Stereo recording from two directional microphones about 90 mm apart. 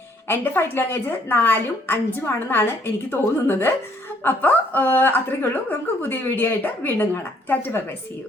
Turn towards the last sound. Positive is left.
turn(degrees=20)  # may be behind; listen again after turning